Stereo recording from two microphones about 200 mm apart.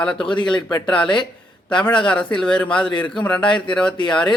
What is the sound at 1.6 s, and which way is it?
A man's voice, 5° left (ahead or behind).